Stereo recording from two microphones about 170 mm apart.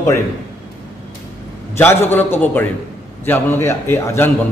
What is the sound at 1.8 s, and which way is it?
A man's voice, 15° left (ahead or behind).